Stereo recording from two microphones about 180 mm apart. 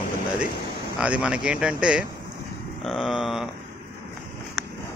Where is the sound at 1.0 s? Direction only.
5° right (ahead or behind).